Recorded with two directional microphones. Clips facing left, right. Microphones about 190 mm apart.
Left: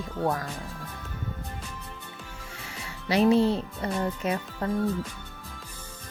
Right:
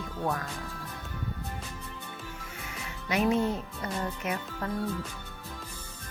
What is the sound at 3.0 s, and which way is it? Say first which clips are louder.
Speech: left 5 dB; 35° left (ahead or behind).